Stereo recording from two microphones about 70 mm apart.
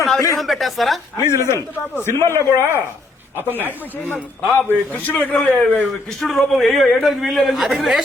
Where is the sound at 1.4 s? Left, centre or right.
Left.